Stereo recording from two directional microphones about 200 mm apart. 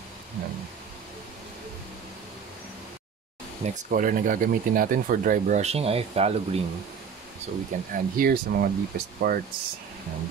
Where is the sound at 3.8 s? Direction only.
45° right (ahead or behind).